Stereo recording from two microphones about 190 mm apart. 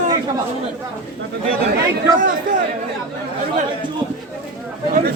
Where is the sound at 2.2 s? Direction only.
45° right (ahead or behind).